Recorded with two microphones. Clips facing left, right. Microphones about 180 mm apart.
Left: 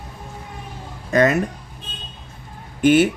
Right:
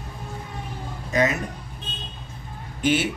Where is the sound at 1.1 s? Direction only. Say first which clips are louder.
Left 6 dB; 55° left (ahead or behind).